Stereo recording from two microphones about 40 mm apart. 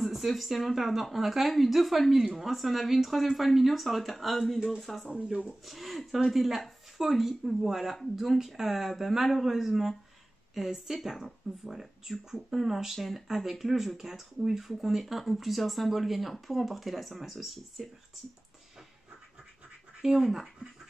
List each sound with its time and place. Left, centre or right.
0.0 s speech: centre
5.1 s speech: right
5.7 s a woman's voice: centre
20.0 s speech: centre